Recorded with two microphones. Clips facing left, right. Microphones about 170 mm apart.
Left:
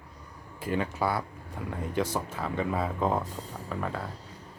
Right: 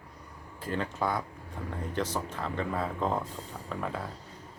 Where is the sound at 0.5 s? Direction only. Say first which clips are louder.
Left 3 dB; 10° left (ahead or behind).